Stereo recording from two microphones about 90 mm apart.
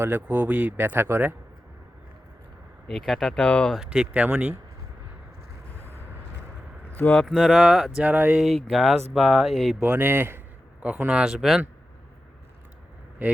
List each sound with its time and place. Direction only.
0.0 s speech: 20° right (ahead or behind)
2.8 s speech: 5° left (ahead or behind)
3.3 s speech: 15° left (ahead or behind)
3.8 s speech: 10° right (ahead or behind)
6.9 s speech: 20° left (ahead or behind)
7.3 s speech: centre (ahead or behind); by 8.4 s 15° right (ahead or behind)
8.7 s speech: centre (ahead or behind)
9.8 s a sound: 15° right (ahead or behind)
10.8 s speech: 15° right (ahead or behind)